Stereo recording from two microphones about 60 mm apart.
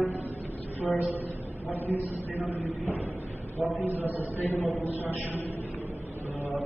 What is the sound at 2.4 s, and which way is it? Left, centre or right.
A man's voice, left.